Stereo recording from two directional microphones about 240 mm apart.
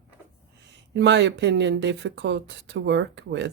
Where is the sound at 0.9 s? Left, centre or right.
Right.